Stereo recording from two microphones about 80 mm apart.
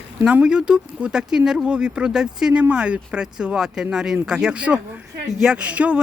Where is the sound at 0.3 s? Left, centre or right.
Centre.